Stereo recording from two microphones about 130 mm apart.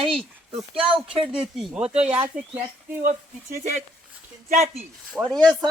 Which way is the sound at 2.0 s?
45° right (ahead or behind).